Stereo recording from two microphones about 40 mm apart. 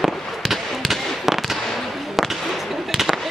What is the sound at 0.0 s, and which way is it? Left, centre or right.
Fireworks, centre.